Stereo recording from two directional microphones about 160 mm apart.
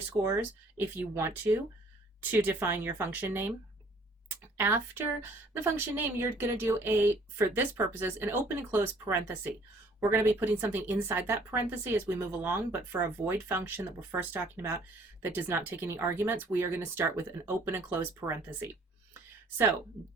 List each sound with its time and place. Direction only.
0.1 s a woman's voice: 15° right (ahead or behind)
4.5 s a woman's voice: 15° right (ahead or behind)